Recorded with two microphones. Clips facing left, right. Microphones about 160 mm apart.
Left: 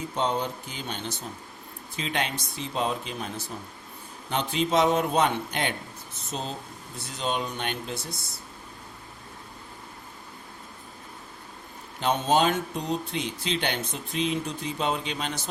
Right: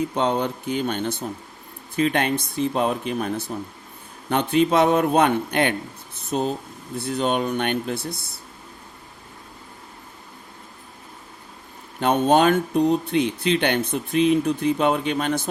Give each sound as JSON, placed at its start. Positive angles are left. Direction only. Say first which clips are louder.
{"t": 0.2, "sound": "speech", "louder": "right 2 dB", "side_deg": -60}
{"t": 11.9, "sound": "speech", "louder": "right 6 dB", "side_deg": -55}